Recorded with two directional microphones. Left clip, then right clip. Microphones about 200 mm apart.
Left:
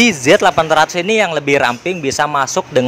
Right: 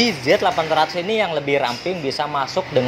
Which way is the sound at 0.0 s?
45° left (ahead or behind).